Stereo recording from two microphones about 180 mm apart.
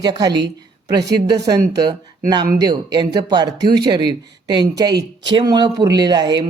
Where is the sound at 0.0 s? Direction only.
25° right (ahead or behind).